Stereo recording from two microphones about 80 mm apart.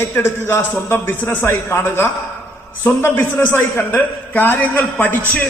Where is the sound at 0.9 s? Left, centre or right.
Left.